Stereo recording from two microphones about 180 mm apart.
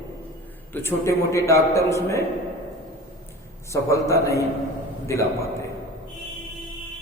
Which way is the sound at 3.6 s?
15° left (ahead or behind).